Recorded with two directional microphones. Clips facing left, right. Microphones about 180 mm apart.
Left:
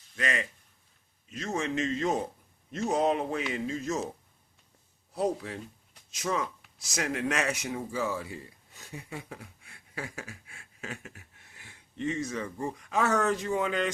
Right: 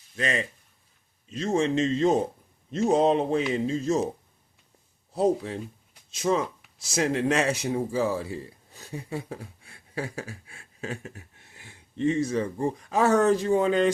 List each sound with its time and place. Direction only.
0.2 s speech: 30° right (ahead or behind)
5.1 s speech: 30° right (ahead or behind)